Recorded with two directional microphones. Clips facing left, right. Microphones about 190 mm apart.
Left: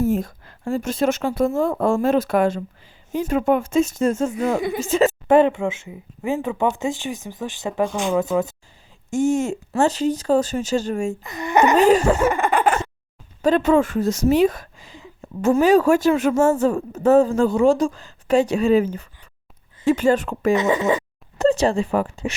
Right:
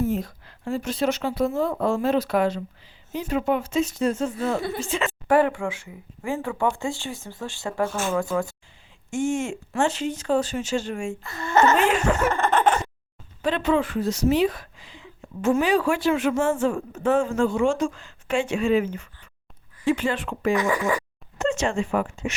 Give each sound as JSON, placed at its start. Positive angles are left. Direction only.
{"t": 0.0, "sound": "speech", "side_deg": 45}
{"t": 5.3, "sound": "speech", "side_deg": 25}
{"t": 9.0, "sound": "speech", "side_deg": 40}
{"t": 11.2, "sound": "speech", "side_deg": 15}
{"t": 11.8, "sound": "speech", "side_deg": 40}
{"t": 12.3, "sound": "a sound", "side_deg": 10}
{"t": 13.4, "sound": "speech", "side_deg": 45}
{"t": 20.5, "sound": "speech", "side_deg": 25}
{"t": 21.3, "sound": "speech", "side_deg": 35}